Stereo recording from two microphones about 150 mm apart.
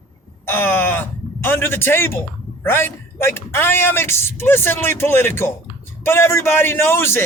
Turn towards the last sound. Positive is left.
turn(degrees=15)  # may be behind; listen again after turning